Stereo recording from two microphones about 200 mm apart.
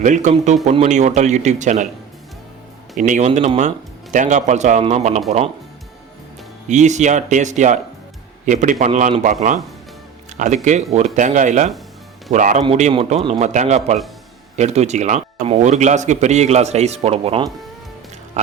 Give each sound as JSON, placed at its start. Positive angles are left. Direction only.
{"t": 0.0, "sound": "a man's voice", "side_deg": -40}
{"t": 3.0, "sound": "a man's voice", "side_deg": -35}
{"t": 6.7, "sound": "a man's voice", "side_deg": -35}